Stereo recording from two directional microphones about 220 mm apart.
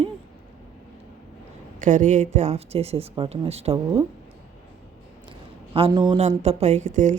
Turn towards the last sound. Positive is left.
turn(degrees=-35)  # may be behind; listen again after turning